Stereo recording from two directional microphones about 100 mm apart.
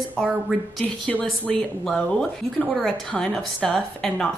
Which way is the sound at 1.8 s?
5° left (ahead or behind).